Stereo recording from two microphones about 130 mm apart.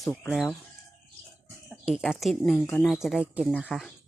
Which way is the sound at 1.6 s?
5° right (ahead or behind).